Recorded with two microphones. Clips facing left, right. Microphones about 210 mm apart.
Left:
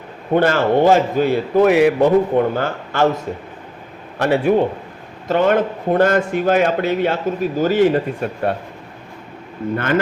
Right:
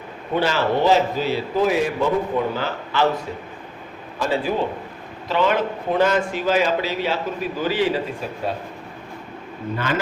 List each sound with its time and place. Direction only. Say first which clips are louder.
0.3 s a man's voice: left 6 dB; 50° left (ahead or behind)
4.2 s a man's voice: left 7 dB; 65° left (ahead or behind)
5.3 s a man's voice: left 5 dB; 50° left (ahead or behind)
9.7 s a man's voice: left 6 dB; 55° left (ahead or behind)